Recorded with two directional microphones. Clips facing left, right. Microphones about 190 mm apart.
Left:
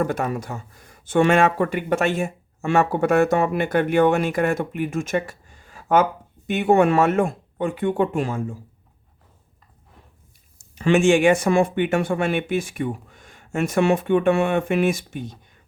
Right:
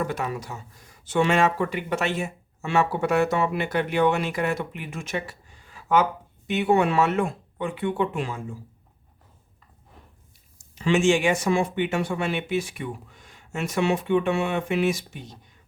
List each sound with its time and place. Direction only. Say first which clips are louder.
0.0 s speech: left 5 dB; 50° left (ahead or behind)
10.8 s speech: left 4 dB; 55° left (ahead or behind)